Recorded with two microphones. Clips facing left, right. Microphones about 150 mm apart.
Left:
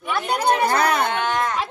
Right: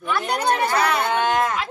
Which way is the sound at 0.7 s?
45° left (ahead or behind).